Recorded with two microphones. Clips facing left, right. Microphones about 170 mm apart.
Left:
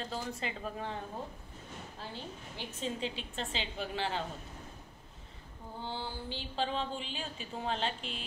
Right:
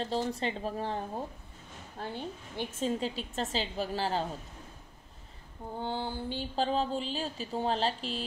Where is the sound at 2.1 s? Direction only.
50° right (ahead or behind).